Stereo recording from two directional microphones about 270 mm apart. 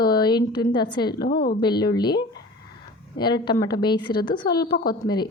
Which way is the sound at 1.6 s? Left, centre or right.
Centre.